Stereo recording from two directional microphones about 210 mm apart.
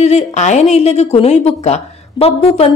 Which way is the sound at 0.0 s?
30° left (ahead or behind).